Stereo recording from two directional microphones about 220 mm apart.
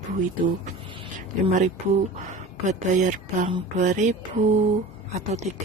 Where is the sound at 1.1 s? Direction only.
35° right (ahead or behind).